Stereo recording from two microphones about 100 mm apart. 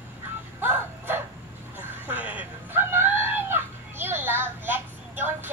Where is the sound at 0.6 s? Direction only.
20° right (ahead or behind).